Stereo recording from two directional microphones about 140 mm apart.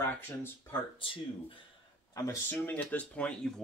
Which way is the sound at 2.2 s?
25° left (ahead or behind).